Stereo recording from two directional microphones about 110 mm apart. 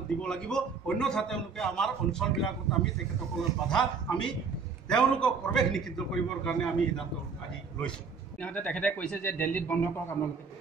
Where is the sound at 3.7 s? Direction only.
5° left (ahead or behind).